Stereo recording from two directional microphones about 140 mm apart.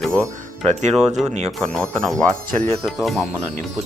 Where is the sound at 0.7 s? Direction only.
55° right (ahead or behind).